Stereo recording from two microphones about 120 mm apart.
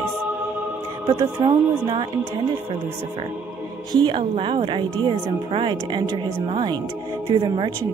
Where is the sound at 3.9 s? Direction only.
40° right (ahead or behind).